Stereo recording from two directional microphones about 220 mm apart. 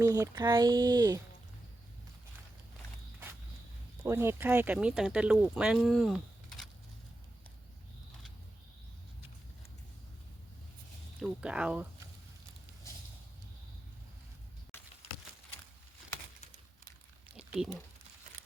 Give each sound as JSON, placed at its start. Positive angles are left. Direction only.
{"t": 0.0, "sound": "speech", "side_deg": -15}
{"t": 4.0, "sound": "speech", "side_deg": -10}
{"t": 11.2, "sound": "speech", "side_deg": -5}
{"t": 17.3, "sound": "a sound", "side_deg": -5}